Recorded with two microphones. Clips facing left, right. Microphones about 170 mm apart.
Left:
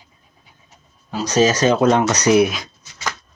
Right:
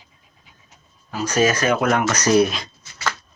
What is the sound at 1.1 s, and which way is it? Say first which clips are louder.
Speech: left 3 dB; 25° left (ahead or behind).